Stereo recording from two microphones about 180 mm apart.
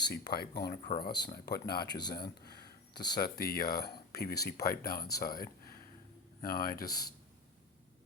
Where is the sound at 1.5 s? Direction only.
60° left (ahead or behind).